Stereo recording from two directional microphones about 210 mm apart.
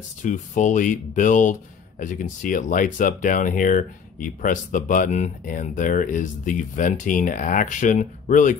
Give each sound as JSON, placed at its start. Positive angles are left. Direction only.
{"t": 0.2, "sound": "speech", "side_deg": 35}